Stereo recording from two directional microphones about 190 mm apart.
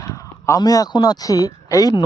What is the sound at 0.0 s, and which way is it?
Speech, 15° left (ahead or behind).